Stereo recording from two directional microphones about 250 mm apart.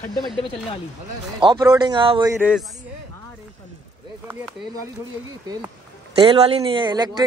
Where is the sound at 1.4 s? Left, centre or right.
Centre.